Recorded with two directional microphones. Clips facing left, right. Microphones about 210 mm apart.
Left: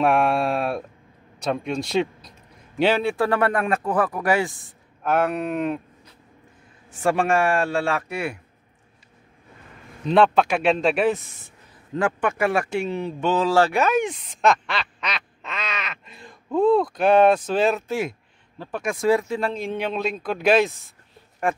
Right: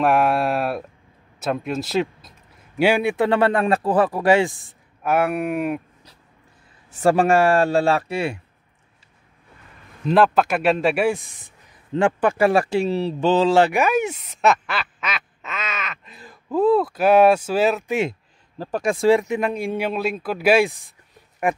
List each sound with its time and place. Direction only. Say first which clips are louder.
0.0 s a man's voice: right 1 dB; 5° right (ahead or behind); by 4.6 s 25° right (ahead or behind)
5.0 s speech: right 2 dB; 10° right (ahead or behind)
7.0 s speech: right 4 dB; 35° right (ahead or behind)
10.0 s speech: right 1 dB; 5° right (ahead or behind)
11.9 s speech: right 4 dB; 30° right (ahead or behind)
13.5 s speech: right 2 dB; 15° right (ahead or behind)
18.6 s speech: right 4 dB; 35° right (ahead or behind); by 21.6 s 15° right (ahead or behind)